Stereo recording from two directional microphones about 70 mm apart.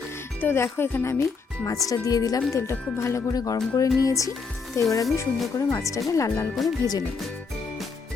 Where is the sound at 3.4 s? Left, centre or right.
Left.